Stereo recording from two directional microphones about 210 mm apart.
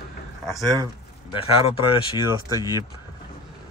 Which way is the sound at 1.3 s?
25° left (ahead or behind).